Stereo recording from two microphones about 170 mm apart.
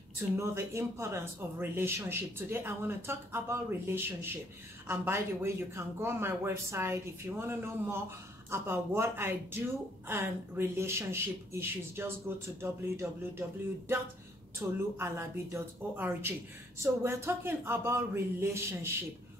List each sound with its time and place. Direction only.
0.4 s a woman's voice: 15° right (ahead or behind)